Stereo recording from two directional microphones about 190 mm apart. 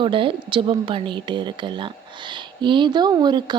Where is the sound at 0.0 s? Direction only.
25° right (ahead or behind).